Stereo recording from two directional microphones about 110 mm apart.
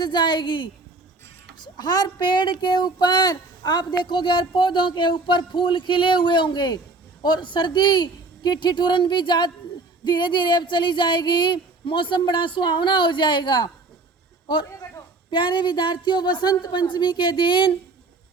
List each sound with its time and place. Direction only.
0.0 s a man's voice: 45° left (ahead or behind)